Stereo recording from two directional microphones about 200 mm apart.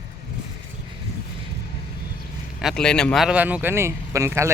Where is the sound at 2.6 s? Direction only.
5° left (ahead or behind); by 4.5 s 15° right (ahead or behind).